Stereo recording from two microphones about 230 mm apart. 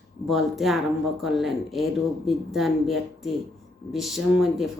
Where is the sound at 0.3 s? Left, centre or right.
Centre.